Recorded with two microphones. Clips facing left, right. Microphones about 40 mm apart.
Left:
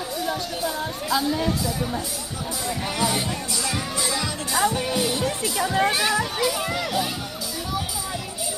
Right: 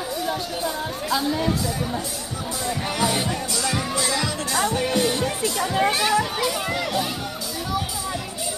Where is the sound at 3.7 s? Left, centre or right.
Centre.